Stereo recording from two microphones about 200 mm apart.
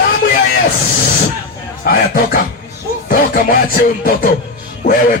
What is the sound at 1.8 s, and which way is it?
Speech, 50° left (ahead or behind).